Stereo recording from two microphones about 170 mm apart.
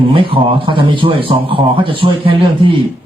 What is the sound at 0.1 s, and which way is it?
Speech, 30° right (ahead or behind).